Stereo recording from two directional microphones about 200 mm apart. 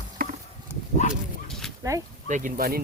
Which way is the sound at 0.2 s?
45° right (ahead or behind).